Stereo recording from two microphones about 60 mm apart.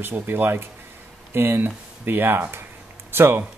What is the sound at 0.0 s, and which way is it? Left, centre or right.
Speech, right.